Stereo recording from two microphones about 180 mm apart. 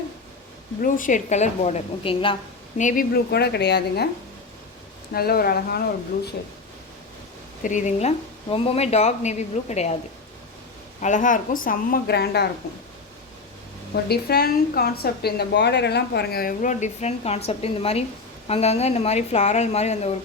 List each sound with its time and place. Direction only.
0.8 s speech: 50° left (ahead or behind)
2.7 s a woman's voice: 45° left (ahead or behind); by 4.1 s 65° left (ahead or behind)
5.1 s a woman's voice: 55° left (ahead or behind)
7.6 s speech: 45° left (ahead or behind)
11.0 s a woman's voice: 45° left (ahead or behind); by 12.5 s 65° left (ahead or behind)
13.9 s a woman's voice: 60° left (ahead or behind); by 20.1 s 35° left (ahead or behind)